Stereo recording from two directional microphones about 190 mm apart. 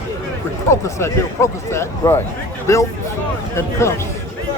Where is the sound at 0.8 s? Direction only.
15° left (ahead or behind).